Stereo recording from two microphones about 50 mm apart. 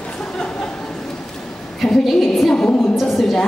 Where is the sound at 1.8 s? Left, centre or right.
Centre.